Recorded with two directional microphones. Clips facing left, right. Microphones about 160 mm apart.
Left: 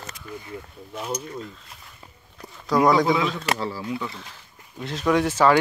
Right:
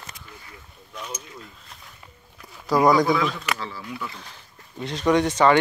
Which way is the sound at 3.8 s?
20° left (ahead or behind).